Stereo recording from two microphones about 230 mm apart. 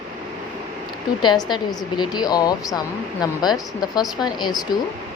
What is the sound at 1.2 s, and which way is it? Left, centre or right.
Speech, centre.